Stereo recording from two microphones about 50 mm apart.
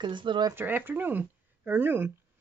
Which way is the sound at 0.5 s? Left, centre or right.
Right.